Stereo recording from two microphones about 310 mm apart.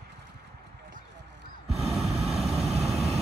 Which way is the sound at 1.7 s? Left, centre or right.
Centre.